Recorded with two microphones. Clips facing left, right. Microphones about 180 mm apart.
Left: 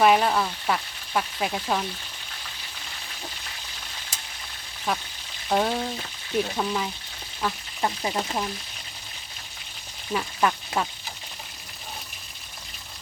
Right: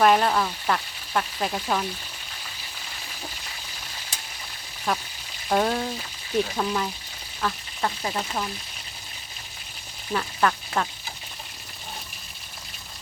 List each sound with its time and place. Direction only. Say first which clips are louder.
0.0 s frying: even; 5° left (ahead or behind)
4.9 s frying: right 1 dB; centre (ahead or behind)
7.4 s speech: even; 15° left (ahead or behind)
10.1 s speech: even; 10° left (ahead or behind)